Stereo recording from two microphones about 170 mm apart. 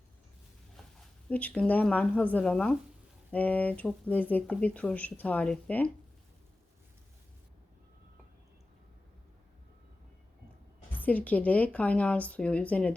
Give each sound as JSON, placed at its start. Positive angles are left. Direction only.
{"t": 1.3, "sound": "speech", "side_deg": 10}
{"t": 10.9, "sound": "speech", "side_deg": 10}